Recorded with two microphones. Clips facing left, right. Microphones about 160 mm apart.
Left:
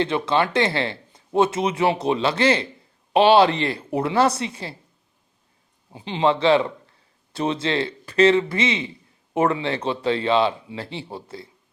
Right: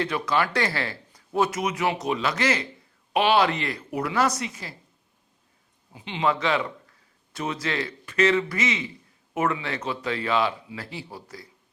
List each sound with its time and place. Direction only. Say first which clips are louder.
0.0 s speech: left 4 dB; 25° left (ahead or behind)
5.9 s speech: left 5 dB; 30° left (ahead or behind)